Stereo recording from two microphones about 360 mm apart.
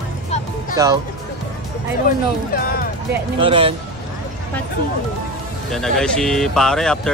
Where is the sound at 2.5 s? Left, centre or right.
Left.